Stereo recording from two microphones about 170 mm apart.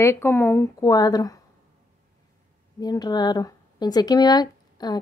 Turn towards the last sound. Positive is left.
turn(degrees=25)  # may be behind; listen again after turning